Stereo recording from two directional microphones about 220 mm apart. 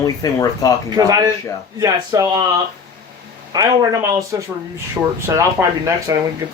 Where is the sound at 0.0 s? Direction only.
15° left (ahead or behind).